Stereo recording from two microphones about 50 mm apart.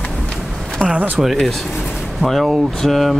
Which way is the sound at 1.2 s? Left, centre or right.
Centre.